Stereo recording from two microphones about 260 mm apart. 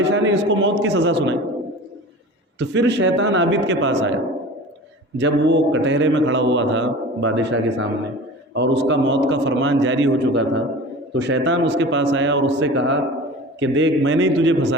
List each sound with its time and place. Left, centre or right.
0.0 s a man's voice: right
2.6 s a man's voice: right
5.1 s a man's voice: right